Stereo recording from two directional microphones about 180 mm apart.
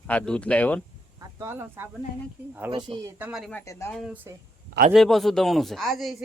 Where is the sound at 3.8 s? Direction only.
5° left (ahead or behind).